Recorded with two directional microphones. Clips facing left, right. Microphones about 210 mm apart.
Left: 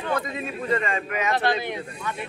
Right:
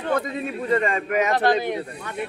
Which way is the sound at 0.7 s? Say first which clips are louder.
Right 4 dB; 40° right (ahead or behind).